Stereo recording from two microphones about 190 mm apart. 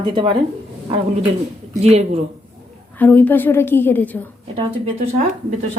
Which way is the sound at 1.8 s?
35° right (ahead or behind).